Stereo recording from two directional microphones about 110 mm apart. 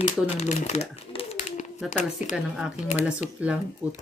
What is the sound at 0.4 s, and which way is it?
Speech, 90° left.